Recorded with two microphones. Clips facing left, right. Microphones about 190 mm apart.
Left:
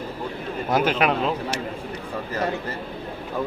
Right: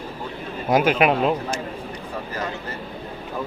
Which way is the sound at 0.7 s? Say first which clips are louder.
Right 3 dB; 10° right (ahead or behind).